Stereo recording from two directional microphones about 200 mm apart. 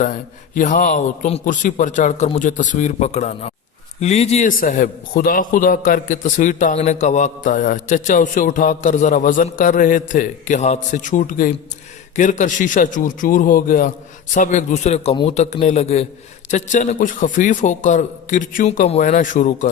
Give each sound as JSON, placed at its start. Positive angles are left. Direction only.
{"t": 0.0, "sound": "a man's voice", "side_deg": 40}